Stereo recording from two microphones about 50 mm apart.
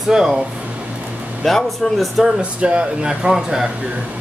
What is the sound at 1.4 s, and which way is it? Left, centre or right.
Speech, centre.